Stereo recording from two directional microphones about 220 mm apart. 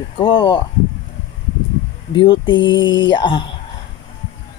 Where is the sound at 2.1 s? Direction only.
25° left (ahead or behind).